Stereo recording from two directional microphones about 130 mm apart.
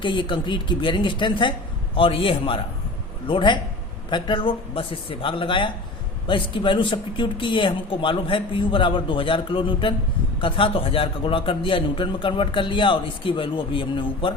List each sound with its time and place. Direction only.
0.0 s a man's voice: 40° left (ahead or behind)